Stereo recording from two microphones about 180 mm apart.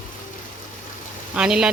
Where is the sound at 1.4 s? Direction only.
5° right (ahead or behind).